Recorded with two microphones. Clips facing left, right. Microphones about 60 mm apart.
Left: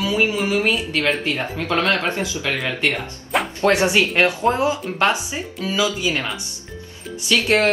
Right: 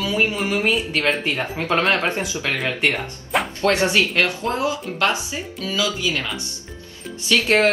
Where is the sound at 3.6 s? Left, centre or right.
Left.